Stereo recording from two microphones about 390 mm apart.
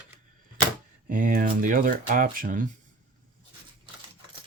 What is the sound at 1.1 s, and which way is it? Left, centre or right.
Speech, right.